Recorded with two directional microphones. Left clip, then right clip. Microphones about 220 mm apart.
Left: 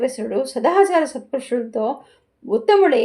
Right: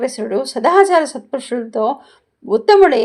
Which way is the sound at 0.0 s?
25° right (ahead or behind).